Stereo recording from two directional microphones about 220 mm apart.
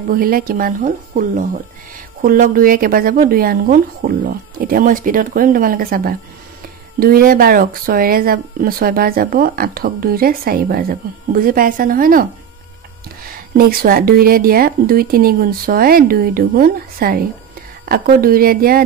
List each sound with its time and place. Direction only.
0.1 s speech: 40° right (ahead or behind)